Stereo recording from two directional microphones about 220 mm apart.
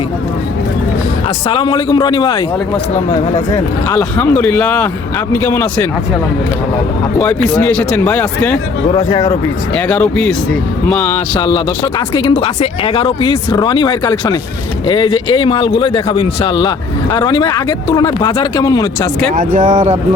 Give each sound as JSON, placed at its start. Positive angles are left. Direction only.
{"t": 1.5, "sound": "speech", "side_deg": 20}
{"t": 3.5, "sound": "speech", "side_deg": 15}
{"t": 7.2, "sound": "speech", "side_deg": 0}
{"t": 9.0, "sound": "speech", "side_deg": 15}
{"t": 9.7, "sound": "speech", "side_deg": 5}
{"t": 11.3, "sound": "speech", "side_deg": 20}
{"t": 19.4, "sound": "speech", "side_deg": -35}